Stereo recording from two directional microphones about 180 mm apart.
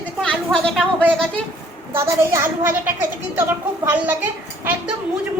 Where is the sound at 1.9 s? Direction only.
15° right (ahead or behind).